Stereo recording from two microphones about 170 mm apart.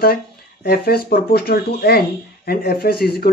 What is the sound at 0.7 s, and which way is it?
Speech, 65° left (ahead or behind).